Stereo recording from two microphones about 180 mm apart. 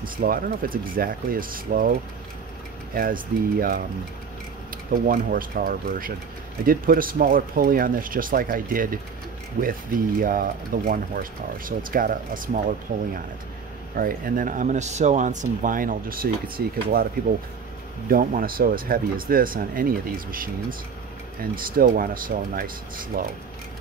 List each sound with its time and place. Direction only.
0.0 s speech: 50° right (ahead or behind)
5.0 s speech: 50° right (ahead or behind)
10.2 s speech: 50° right (ahead or behind)